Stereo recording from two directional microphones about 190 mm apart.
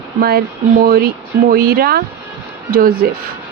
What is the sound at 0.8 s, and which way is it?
Speech, 55° right (ahead or behind).